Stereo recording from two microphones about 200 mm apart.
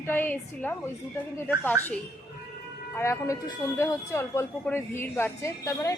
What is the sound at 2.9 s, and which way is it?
A woman's voice, 15° left (ahead or behind).